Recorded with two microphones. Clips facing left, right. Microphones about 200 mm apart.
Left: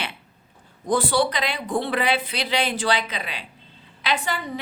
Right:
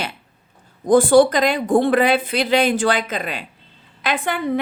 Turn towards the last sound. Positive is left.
turn(degrees=-55)  # may be behind; listen again after turning